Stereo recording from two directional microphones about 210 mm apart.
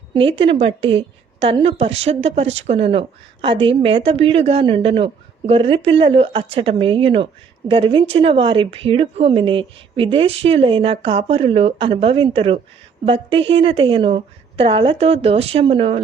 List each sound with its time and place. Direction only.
0.1 s a woman's voice: 25° right (ahead or behind)